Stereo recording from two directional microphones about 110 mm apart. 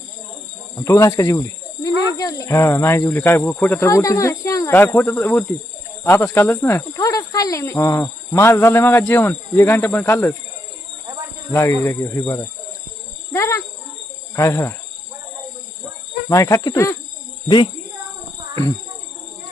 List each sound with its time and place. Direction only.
0.8 s speech: 25° left (ahead or behind)
3.8 s speech: 30° left (ahead or behind)
11.8 s speech: 25° left (ahead or behind)
13.3 s speech: 25° left (ahead or behind)
16.3 s speech: 30° left (ahead or behind)